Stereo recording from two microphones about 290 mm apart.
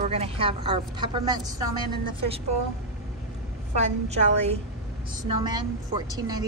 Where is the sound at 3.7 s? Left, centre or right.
Right.